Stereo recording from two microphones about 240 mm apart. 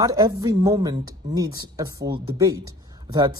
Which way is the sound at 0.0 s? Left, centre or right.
Centre.